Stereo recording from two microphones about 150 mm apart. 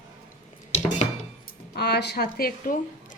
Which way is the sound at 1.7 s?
90° left.